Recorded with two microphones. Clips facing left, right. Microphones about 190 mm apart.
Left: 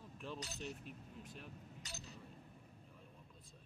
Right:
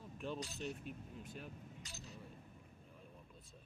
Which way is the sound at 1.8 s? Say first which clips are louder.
Left 3 dB; 75° left (ahead or behind).